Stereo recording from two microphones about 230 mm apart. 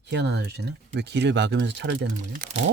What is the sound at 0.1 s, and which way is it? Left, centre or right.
Speech, right.